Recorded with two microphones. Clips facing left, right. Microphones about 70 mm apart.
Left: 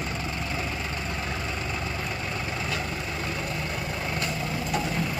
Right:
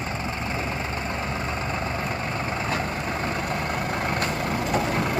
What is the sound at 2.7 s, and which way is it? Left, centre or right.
Vehicle, right.